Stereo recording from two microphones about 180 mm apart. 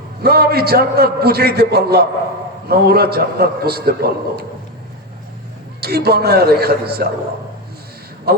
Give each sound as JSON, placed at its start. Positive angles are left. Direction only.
{"t": 0.2, "sound": "a man's voice", "side_deg": -60}
{"t": 5.8, "sound": "a man's voice", "side_deg": -60}
{"t": 8.3, "sound": "a man's voice", "side_deg": -60}